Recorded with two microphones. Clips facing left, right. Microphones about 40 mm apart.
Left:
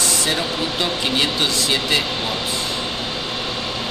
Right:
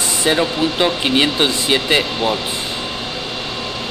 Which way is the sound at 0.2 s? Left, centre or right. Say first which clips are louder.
Right 5 dB; right.